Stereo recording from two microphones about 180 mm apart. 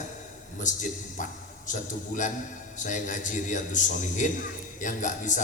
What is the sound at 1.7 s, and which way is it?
A man's voice, 45° left (ahead or behind).